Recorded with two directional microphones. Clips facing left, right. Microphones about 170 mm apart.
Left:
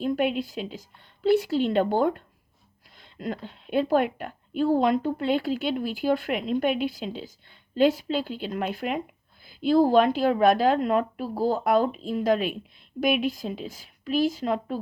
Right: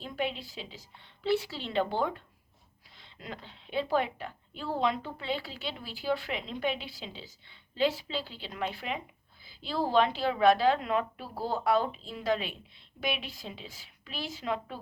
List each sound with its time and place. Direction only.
0.0 s a woman's voice: 50° left (ahead or behind)